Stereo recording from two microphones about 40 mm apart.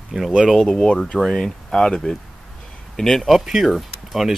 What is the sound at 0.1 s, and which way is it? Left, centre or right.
Speech, centre.